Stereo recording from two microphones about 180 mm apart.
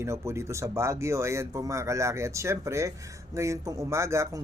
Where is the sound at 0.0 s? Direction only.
15° right (ahead or behind).